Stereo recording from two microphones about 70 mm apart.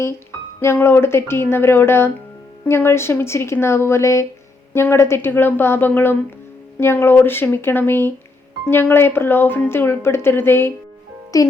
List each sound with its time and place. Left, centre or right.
0.6 s speech: left
11.3 s speech: left